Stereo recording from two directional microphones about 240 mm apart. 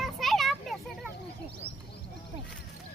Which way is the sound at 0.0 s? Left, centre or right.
Centre.